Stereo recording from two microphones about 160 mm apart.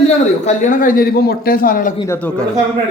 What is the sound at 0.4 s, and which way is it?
A man's voice, 50° left (ahead or behind).